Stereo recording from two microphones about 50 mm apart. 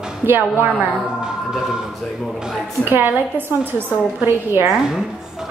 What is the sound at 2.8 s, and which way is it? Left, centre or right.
Speech, right.